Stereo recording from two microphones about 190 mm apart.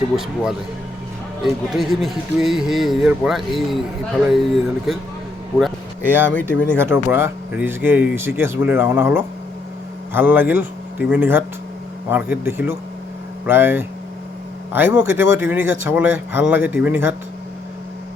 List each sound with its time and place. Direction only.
1.7 s speech: centre (ahead or behind)
6.1 s speech: 10° right (ahead or behind)
6.3 s speech: 5° left (ahead or behind)
6.7 s speech: 10° right (ahead or behind)